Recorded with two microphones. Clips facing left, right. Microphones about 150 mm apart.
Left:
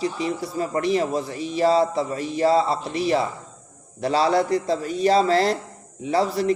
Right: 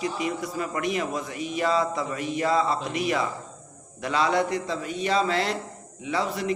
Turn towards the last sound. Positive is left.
turn(degrees=35)  # may be behind; listen again after turning